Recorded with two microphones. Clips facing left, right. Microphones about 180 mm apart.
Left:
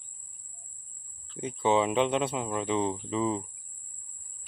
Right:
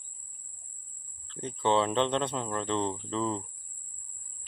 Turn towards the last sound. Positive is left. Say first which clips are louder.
# left 2 dB
turn(degrees=10)  # may be behind; listen again after turning